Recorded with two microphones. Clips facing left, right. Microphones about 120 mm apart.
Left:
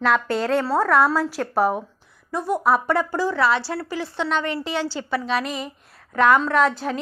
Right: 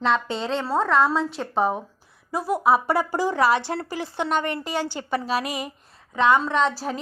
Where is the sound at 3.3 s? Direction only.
45° right (ahead or behind).